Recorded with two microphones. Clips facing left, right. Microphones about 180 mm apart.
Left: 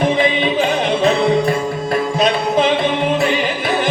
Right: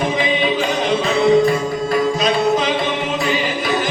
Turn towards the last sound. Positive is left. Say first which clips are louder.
# left 1 dB
turn(degrees=55)  # may be behind; listen again after turning